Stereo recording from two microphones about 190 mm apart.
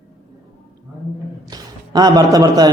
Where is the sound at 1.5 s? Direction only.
20° right (ahead or behind).